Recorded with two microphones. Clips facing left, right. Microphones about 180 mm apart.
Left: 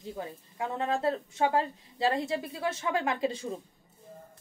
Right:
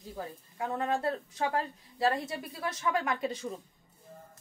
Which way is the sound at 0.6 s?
25° left (ahead or behind).